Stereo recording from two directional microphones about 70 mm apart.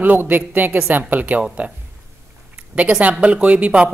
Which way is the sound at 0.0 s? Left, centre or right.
Right.